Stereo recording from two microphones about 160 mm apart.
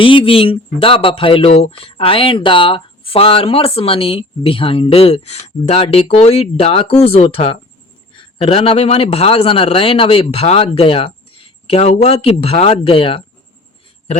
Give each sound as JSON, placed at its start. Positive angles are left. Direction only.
{"t": 0.0, "sound": "speech", "side_deg": 35}